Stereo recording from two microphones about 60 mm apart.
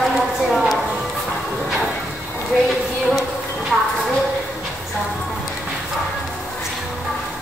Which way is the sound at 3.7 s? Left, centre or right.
Centre.